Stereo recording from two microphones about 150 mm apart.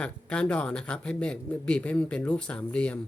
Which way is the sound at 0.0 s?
5° left (ahead or behind).